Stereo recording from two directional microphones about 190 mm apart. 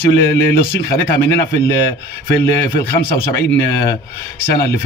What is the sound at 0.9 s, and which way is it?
Speech, 15° left (ahead or behind).